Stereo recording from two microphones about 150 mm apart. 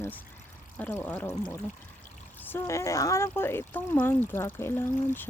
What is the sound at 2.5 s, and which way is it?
Speech, 15° left (ahead or behind).